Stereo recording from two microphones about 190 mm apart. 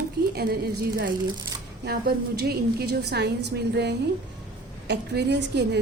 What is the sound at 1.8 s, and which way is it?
A woman's voice, 55° right (ahead or behind).